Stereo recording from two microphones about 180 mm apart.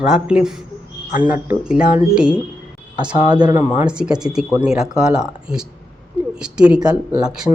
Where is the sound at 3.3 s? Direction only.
25° right (ahead or behind).